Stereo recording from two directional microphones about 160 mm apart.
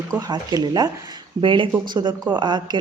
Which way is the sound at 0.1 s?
20° right (ahead or behind).